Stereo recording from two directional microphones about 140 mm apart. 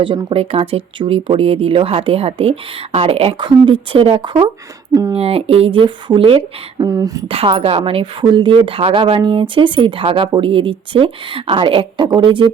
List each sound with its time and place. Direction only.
0.0 s a woman's voice: 35° right (ahead or behind)
5.1 s speech: 45° right (ahead or behind)
6.8 s speech: 25° right (ahead or behind)
7.3 s a woman's voice: 45° right (ahead or behind)